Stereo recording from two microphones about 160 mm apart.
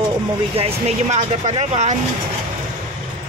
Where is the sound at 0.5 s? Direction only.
40° right (ahead or behind).